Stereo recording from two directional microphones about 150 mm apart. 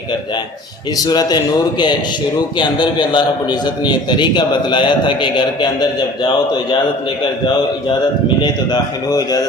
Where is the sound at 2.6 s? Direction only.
30° left (ahead or behind).